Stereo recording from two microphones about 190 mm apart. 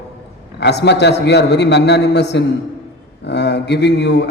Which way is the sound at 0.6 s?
65° left (ahead or behind).